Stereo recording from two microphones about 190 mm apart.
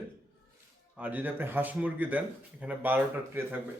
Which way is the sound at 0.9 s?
10° right (ahead or behind).